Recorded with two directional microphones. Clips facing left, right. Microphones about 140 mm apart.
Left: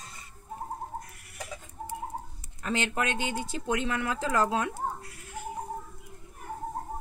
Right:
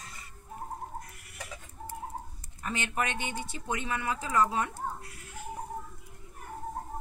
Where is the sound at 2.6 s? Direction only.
90° left.